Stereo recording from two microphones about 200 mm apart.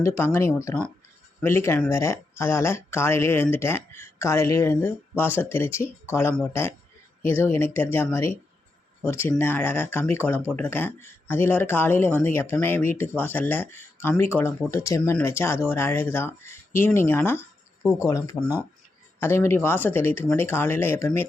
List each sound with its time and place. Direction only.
0.0 s speech: 15° left (ahead or behind)